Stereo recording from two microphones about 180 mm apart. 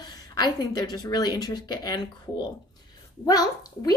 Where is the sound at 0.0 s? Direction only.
20° left (ahead or behind).